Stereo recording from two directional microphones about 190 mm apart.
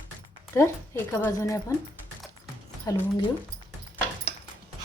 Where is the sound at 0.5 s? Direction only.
15° left (ahead or behind).